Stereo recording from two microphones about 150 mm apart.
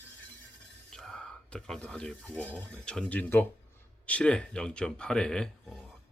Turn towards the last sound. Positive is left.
turn(degrees=0)  # may be behind; listen again after turning